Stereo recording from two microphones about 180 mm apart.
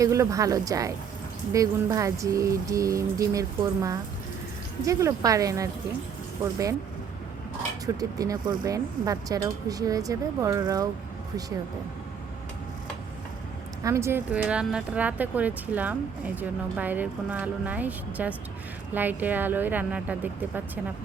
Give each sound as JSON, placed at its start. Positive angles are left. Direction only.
{"t": 0.0, "sound": "speech", "side_deg": -15}
{"t": 7.9, "sound": "speech", "side_deg": -20}
{"t": 13.8, "sound": "speech", "side_deg": -15}